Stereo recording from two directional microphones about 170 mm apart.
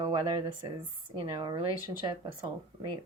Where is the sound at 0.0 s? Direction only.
30° right (ahead or behind).